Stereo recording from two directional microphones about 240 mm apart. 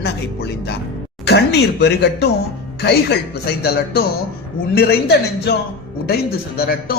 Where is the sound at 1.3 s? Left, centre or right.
Left.